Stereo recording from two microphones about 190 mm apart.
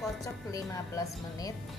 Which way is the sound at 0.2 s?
20° left (ahead or behind).